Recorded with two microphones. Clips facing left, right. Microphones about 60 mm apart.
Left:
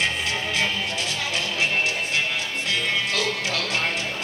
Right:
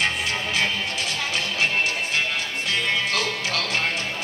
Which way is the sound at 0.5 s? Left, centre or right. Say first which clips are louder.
Right 1 dB; right.